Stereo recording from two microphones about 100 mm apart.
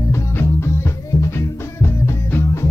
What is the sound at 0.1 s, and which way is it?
Music, 25° left (ahead or behind).